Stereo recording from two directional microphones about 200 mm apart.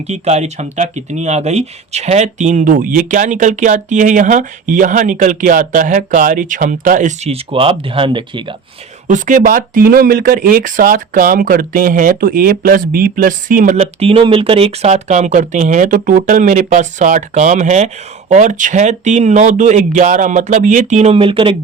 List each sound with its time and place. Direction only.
0.1 s speech: 35° right (ahead or behind)
9.0 s speech: 40° right (ahead or behind)